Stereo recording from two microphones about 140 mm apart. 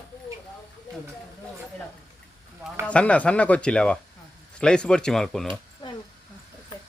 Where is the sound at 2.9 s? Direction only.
10° left (ahead or behind).